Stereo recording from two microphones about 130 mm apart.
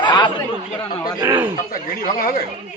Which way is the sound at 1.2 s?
15° right (ahead or behind).